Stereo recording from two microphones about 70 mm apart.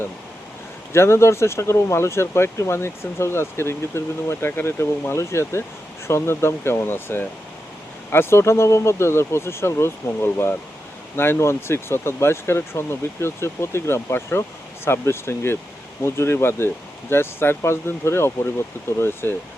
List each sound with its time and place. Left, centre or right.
0.9 s speech: left